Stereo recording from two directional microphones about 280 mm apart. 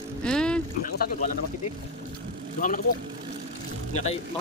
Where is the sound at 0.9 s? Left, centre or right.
Left.